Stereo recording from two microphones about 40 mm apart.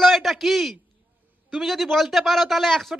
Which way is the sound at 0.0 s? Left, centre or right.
Centre.